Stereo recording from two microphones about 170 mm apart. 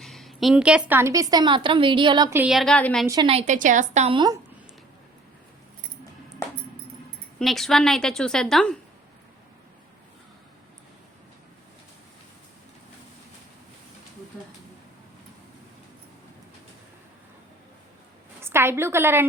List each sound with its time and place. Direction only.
0.0 s a woman's voice: centre (ahead or behind); by 2.3 s 25° right (ahead or behind)
2.3 s a woman's voice: 5° right (ahead or behind)
3.2 s a woman's voice: 40° right (ahead or behind)
7.3 s a woman's voice: centre (ahead or behind)
18.3 s a woman's voice: 15° right (ahead or behind)